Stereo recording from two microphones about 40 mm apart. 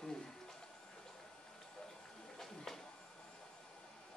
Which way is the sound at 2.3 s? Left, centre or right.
Centre.